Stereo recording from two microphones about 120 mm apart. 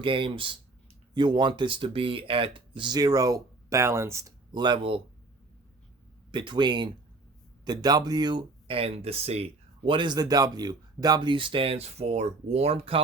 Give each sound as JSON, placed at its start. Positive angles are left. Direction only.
{"t": 0.0, "sound": "speech", "side_deg": -45}
{"t": 4.5, "sound": "speech", "side_deg": -40}
{"t": 6.3, "sound": "speech", "side_deg": -40}